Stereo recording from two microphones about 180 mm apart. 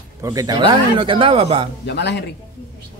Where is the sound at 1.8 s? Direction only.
70° left (ahead or behind).